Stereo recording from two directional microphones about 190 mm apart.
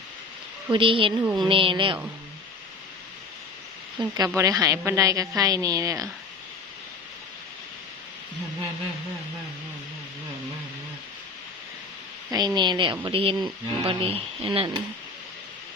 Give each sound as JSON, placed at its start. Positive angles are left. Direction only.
{"t": 0.7, "sound": "speech", "side_deg": -25}
{"t": 1.2, "sound": "a woman's voice", "side_deg": -15}
{"t": 1.5, "sound": "speech", "side_deg": -25}
{"t": 4.4, "sound": "a woman's voice", "side_deg": -15}
{"t": 12.3, "sound": "speech", "side_deg": -20}